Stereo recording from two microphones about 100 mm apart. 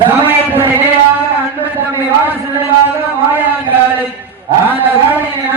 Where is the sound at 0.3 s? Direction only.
20° right (ahead or behind).